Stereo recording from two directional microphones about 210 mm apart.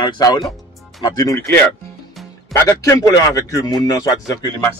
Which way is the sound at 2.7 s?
15° left (ahead or behind).